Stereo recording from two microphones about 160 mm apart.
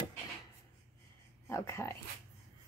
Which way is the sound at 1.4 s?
15° left (ahead or behind).